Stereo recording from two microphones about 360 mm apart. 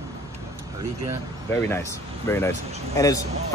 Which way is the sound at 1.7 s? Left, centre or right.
Centre.